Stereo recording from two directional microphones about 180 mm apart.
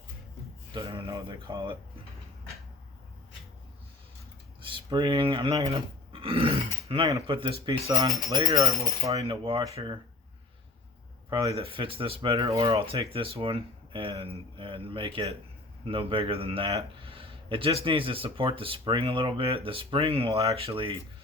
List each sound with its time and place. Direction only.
0.9 s speech: 30° right (ahead or behind)
4.6 s speech: 25° right (ahead or behind)
6.1 s grunt: 30° right (ahead or behind)
7.1 s speech: 30° right (ahead or behind)
8.3 s speech: 30° right (ahead or behind)
8.5 s speech: 20° right (ahead or behind)
9.2 s speech: 30° right (ahead or behind)
11.3 s speech: 25° right (ahead or behind)